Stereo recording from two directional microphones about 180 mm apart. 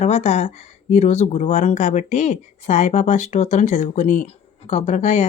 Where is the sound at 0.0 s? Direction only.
40° left (ahead or behind).